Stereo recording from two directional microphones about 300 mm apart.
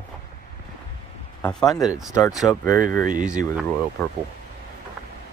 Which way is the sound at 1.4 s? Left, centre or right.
Centre.